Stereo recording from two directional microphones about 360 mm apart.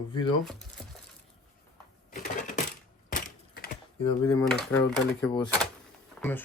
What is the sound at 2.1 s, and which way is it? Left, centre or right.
Typewriter, left.